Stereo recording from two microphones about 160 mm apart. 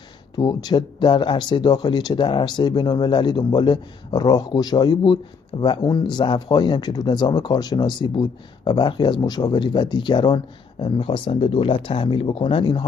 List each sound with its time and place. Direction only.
0.4 s speech: 25° left (ahead or behind)